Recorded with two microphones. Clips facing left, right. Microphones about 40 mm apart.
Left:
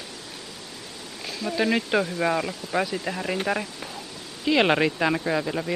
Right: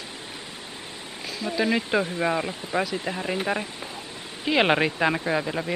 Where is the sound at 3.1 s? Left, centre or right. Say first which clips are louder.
Even; centre.